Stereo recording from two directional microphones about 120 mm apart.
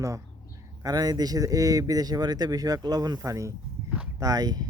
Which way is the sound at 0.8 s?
30° right (ahead or behind).